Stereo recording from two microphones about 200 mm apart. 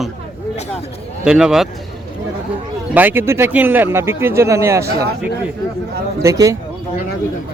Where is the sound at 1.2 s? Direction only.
5° right (ahead or behind).